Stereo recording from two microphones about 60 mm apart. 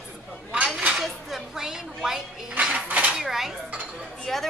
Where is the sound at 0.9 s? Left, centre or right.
Centre.